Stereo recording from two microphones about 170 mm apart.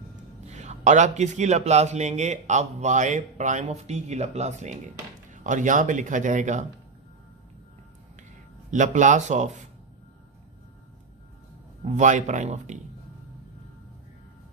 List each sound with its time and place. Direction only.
0.5 s a man's voice: 40° right (ahead or behind)
8.6 s a man's voice: 45° right (ahead or behind)
11.8 s a man's voice: 45° right (ahead or behind)